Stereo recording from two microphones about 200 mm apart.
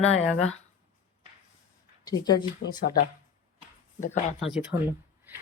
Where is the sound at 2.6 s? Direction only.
60° left (ahead or behind).